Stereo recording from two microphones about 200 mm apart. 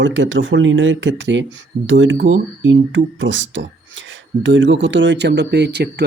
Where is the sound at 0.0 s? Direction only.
65° right (ahead or behind).